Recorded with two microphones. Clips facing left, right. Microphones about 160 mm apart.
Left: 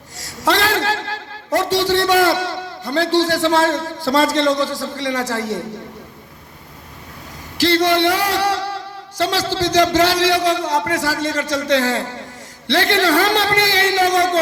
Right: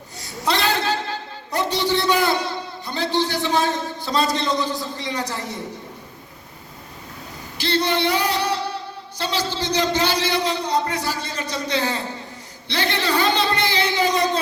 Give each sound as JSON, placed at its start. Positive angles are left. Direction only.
{"t": 0.3, "sound": "a man's voice", "side_deg": 90}
{"t": 7.6, "sound": "a man's voice", "side_deg": 90}